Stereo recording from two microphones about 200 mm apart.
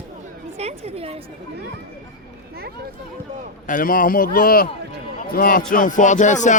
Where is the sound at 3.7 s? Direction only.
45° left (ahead or behind).